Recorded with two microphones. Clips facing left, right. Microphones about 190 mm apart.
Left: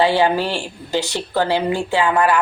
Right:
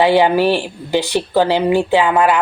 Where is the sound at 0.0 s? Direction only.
15° right (ahead or behind).